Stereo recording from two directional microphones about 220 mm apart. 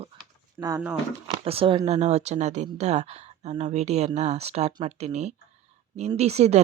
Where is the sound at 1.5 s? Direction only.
25° right (ahead or behind).